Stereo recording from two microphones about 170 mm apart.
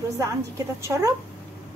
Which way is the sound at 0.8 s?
15° right (ahead or behind).